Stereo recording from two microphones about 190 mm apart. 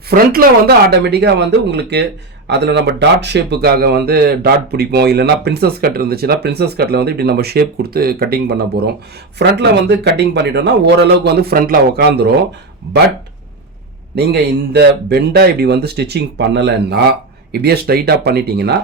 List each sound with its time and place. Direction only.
0.1 s speech: 50° right (ahead or behind)
14.7 s speech: 60° right (ahead or behind)